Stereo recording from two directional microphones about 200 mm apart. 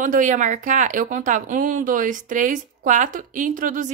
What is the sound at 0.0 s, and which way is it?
Speech, 40° right (ahead or behind).